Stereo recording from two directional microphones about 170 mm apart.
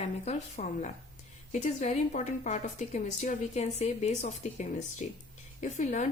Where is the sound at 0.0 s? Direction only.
45° left (ahead or behind).